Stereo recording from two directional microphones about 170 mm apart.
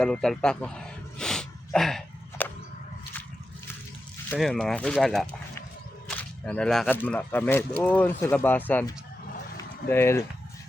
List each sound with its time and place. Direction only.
0.0 s a sound: 5° left (ahead or behind)
4.4 s speech: 5° left (ahead or behind)
6.1 s whip: 10° left (ahead or behind)
6.9 s speech: 10° left (ahead or behind)